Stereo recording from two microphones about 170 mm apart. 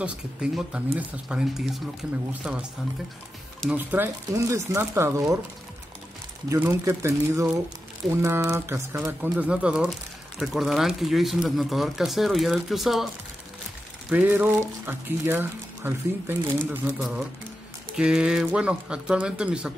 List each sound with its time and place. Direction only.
0.0 s speech: 5° right (ahead or behind)
3.7 s speech: 10° right (ahead or behind)
6.5 s speech: 15° right (ahead or behind)
14.1 s speech: 10° right (ahead or behind)
17.0 s speech: 5° right (ahead or behind)